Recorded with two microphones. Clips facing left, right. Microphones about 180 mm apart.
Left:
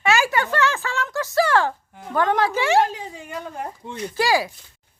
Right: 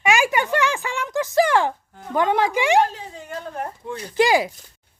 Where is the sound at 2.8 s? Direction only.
15° left (ahead or behind).